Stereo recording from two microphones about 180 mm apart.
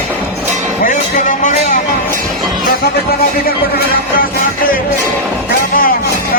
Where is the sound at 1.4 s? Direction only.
45° left (ahead or behind).